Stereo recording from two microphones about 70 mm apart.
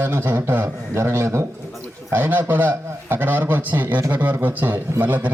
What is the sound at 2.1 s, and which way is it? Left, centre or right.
A man's voice, right.